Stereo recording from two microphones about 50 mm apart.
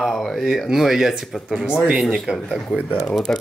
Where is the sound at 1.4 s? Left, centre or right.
Centre.